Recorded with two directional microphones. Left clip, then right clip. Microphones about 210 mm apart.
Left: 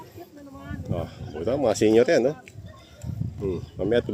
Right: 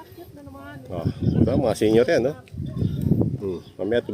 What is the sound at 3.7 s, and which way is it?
Speech, 5° left (ahead or behind).